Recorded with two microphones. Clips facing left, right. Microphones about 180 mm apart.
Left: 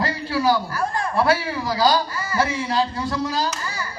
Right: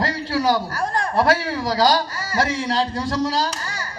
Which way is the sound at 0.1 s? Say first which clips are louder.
Even; 45° right (ahead or behind).